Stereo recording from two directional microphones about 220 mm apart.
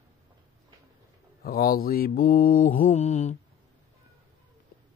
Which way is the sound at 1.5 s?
40° left (ahead or behind).